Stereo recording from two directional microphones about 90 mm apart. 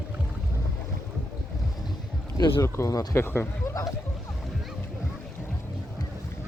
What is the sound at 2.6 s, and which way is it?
Speech, 35° left (ahead or behind).